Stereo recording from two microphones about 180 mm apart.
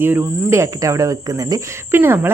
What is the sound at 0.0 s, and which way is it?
Speech, 15° right (ahead or behind).